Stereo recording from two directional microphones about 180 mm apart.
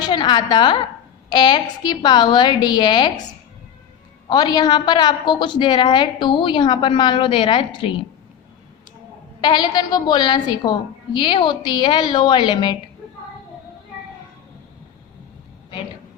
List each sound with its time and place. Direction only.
0.0 s a woman's voice: 25° left (ahead or behind)
4.3 s a woman's voice: 20° left (ahead or behind)
9.4 s a woman's voice: 25° left (ahead or behind)